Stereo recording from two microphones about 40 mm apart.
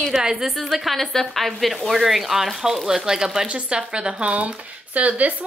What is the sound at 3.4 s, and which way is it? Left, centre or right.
Speech, right.